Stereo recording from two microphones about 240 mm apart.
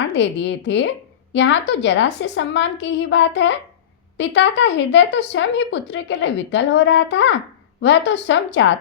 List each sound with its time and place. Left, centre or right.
0.1 s speech: left